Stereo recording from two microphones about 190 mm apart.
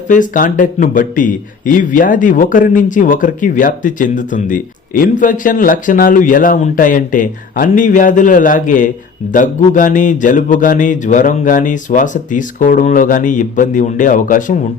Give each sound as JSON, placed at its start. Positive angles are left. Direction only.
{"t": 0.1, "sound": "a man's voice", "side_deg": 40}